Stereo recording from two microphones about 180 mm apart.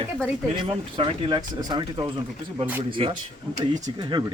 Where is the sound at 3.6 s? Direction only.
40° right (ahead or behind).